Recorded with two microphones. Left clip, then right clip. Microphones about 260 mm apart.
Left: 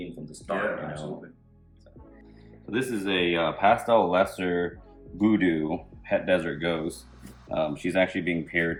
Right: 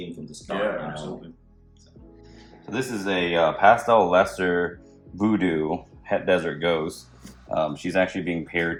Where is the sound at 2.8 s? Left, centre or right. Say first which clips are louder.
Right 1 dB; centre.